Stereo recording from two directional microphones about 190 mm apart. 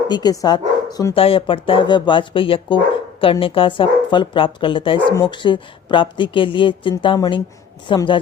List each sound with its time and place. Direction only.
0.1 s speech: 20° left (ahead or behind)